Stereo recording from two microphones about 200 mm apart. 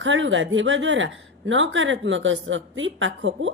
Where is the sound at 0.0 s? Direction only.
70° right (ahead or behind).